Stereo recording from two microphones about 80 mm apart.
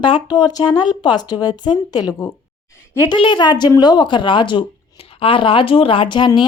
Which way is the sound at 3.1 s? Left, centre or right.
Left.